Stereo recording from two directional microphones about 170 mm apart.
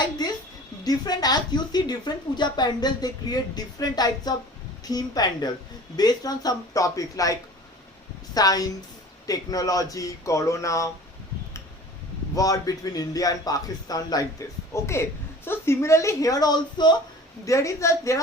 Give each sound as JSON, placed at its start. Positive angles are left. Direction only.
{"t": 0.2, "sound": "a sound", "side_deg": 25}
{"t": 0.9, "sound": "speech", "side_deg": 25}
{"t": 12.3, "sound": "a woman's voice", "side_deg": 20}